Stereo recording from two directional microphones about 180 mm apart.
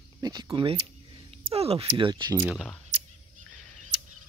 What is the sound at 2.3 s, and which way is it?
Speech, 10° right (ahead or behind).